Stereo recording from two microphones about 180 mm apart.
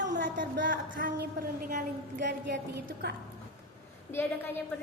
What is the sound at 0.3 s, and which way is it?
A woman's voice, 50° right (ahead or behind).